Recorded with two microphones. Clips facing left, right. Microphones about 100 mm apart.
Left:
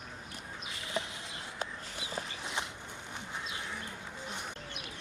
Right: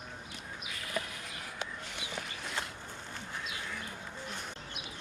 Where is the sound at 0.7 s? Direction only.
25° left (ahead or behind).